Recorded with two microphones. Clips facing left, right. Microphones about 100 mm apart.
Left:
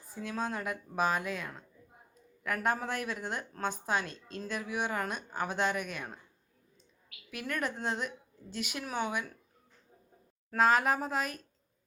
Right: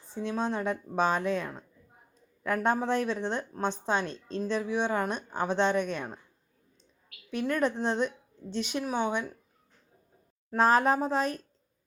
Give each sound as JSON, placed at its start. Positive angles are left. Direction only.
{"t": 0.1, "sound": "a woman's voice", "side_deg": -25}
{"t": 7.3, "sound": "a woman's voice", "side_deg": -30}
{"t": 10.6, "sound": "a woman's voice", "side_deg": -35}